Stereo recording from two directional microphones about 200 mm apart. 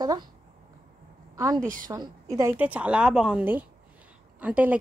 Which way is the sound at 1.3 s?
15° right (ahead or behind).